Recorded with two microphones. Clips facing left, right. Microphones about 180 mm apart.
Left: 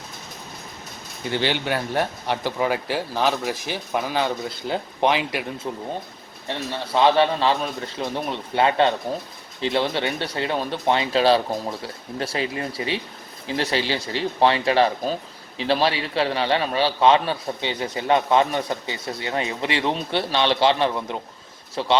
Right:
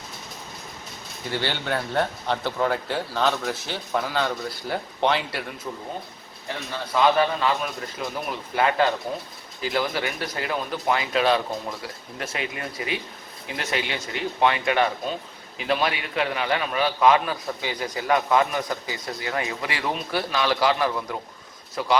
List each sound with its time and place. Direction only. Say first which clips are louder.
1.3 s speech: left 3 dB; 15° left (ahead or behind)
6.9 s a man's voice: left 2 dB; 30° left (ahead or behind)